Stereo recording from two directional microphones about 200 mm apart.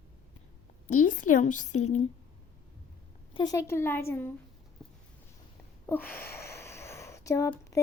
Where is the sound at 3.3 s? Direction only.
20° left (ahead or behind).